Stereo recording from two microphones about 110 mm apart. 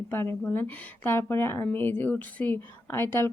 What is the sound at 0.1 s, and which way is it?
Speech, 20° left (ahead or behind).